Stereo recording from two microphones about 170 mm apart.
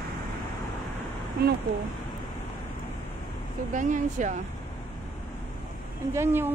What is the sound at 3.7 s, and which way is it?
Speech, 45° right (ahead or behind).